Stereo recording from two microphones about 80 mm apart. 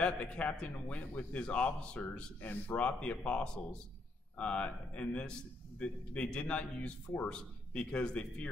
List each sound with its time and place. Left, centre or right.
0.0 s a man's voice: centre